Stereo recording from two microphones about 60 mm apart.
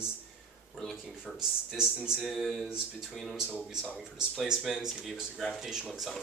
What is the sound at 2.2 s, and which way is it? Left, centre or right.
Speech, centre.